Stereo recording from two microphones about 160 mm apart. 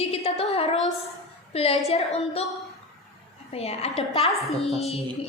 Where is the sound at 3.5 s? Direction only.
40° left (ahead or behind).